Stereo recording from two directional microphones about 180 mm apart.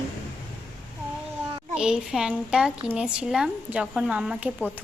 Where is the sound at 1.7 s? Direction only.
5° right (ahead or behind).